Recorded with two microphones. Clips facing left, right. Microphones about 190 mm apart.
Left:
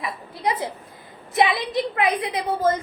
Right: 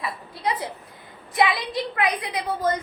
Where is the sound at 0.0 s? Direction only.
25° left (ahead or behind).